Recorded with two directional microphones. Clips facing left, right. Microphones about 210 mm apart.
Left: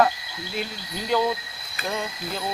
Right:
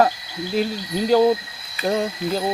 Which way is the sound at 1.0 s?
40° right (ahead or behind).